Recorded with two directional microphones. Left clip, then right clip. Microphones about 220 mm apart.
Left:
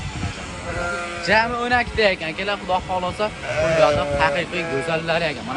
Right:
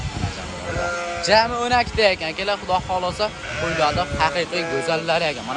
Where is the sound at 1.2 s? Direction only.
10° right (ahead or behind).